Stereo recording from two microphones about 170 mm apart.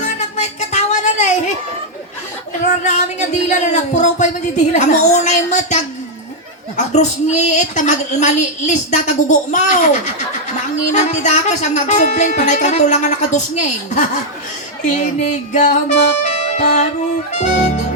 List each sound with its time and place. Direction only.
0.0 s music: 45° left (ahead or behind)
2.8 s a woman's voice: 45° left (ahead or behind)
16.2 s music: 45° left (ahead or behind)